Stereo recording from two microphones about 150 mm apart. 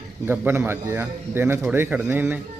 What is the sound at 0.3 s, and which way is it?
Speech, 15° right (ahead or behind).